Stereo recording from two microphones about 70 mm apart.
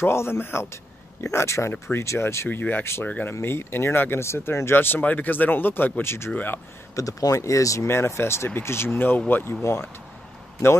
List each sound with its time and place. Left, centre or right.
0.0 s speech: left
1.7 s speech: left
3.1 s speech: left
3.3 s speech: left
7.0 s speech: left
7.8 s speech: left